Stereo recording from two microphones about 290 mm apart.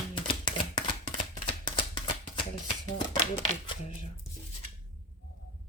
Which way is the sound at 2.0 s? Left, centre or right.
Left.